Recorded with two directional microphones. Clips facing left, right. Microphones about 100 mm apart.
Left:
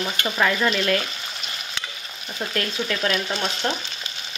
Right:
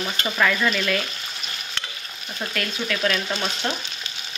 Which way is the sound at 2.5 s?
30° left (ahead or behind).